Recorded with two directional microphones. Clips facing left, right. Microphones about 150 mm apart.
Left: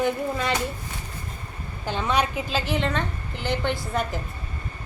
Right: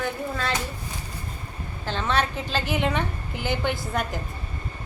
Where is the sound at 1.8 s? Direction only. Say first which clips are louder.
Left 1 dB; 10° left (ahead or behind).